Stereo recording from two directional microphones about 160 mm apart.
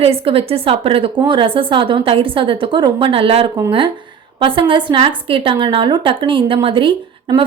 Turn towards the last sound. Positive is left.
turn(degrees=-30)  # may be behind; listen again after turning